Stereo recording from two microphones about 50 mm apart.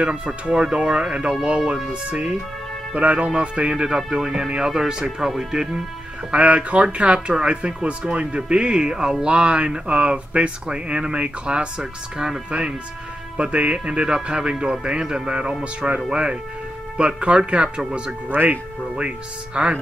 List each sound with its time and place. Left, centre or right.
0.0 s speech: right
6.3 s speech: right
18.3 s speech: right
18.9 s speech: right